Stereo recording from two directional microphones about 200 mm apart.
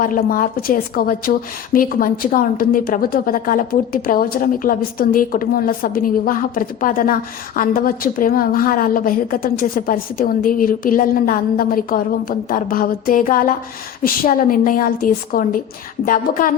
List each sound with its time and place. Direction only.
0.0 s a woman's voice: 45° left (ahead or behind)